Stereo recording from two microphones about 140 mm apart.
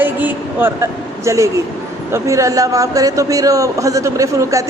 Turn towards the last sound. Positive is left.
turn(degrees=-20)  # may be behind; listen again after turning